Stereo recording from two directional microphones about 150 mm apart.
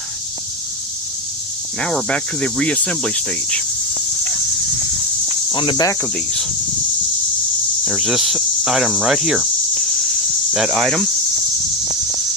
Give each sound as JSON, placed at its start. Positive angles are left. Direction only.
{"t": 1.8, "sound": "speech", "side_deg": 5}
{"t": 5.5, "sound": "cricket", "side_deg": 35}
{"t": 6.0, "sound": "speech", "side_deg": 5}
{"t": 7.9, "sound": "cricket", "side_deg": -5}
{"t": 10.5, "sound": "speech", "side_deg": 0}